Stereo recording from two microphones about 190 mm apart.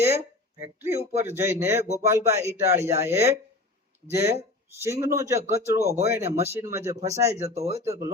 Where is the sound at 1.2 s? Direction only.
15° right (ahead or behind).